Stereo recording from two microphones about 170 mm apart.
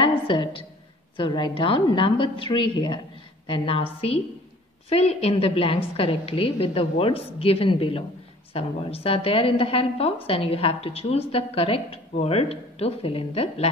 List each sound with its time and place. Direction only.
0.3 s a woman's voice: 30° left (ahead or behind)